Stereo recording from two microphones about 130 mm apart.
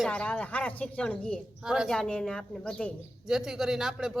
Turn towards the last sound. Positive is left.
turn(degrees=-5)  # may be behind; listen again after turning